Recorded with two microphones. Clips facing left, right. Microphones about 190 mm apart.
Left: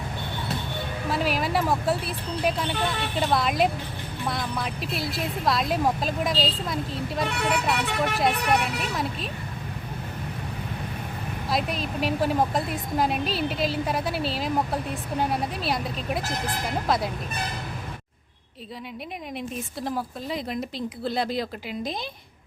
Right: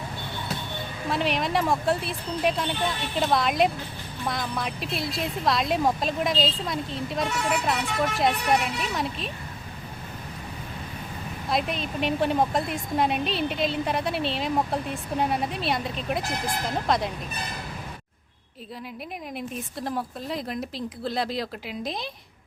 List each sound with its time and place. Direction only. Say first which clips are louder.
1.1 s a woman's voice: even; centre (ahead or behind)
7.3 s speech: left 1 dB; 65° left (ahead or behind)
8.8 s a woman's voice: even; centre (ahead or behind)
11.4 s a woman's voice: even; centre (ahead or behind)
19.5 s a woman's voice: even; centre (ahead or behind)